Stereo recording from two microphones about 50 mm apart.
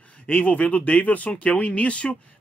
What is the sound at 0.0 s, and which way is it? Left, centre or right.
Speech, left.